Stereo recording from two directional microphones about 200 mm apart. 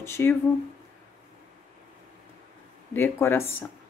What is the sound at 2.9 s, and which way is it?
Speech, 10° left (ahead or behind).